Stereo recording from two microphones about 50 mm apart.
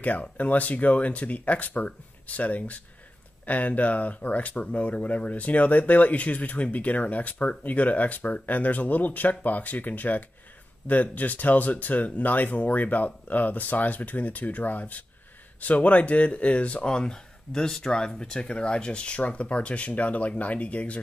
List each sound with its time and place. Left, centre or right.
0.0 s speech: left